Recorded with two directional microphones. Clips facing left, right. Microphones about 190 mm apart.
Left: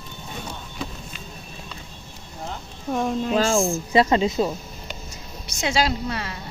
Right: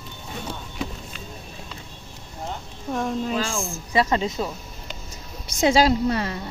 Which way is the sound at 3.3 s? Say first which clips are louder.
Left 7 dB; 35° left (ahead or behind).